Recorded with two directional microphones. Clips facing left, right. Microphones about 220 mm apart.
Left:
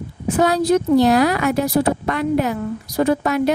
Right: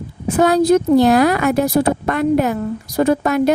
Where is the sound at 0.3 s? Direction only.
50° right (ahead or behind).